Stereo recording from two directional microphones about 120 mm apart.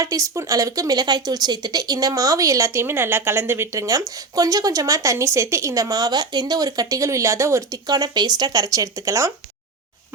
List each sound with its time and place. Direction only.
0.0 s speech: 30° right (ahead or behind)